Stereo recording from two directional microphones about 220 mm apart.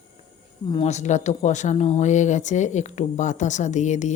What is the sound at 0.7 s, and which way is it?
Speech, 30° left (ahead or behind).